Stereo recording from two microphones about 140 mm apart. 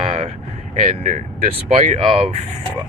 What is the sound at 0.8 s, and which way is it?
Speech, 55° right (ahead or behind).